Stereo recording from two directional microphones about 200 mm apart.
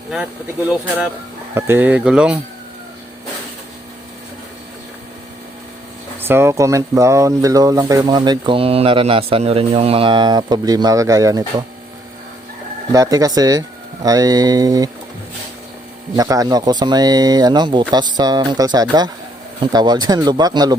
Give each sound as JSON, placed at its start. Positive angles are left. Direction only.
{"t": 1.5, "sound": "speech", "side_deg": -10}
{"t": 6.1, "sound": "speech", "side_deg": -10}
{"t": 12.9, "sound": "speech", "side_deg": -15}
{"t": 16.1, "sound": "speech", "side_deg": -20}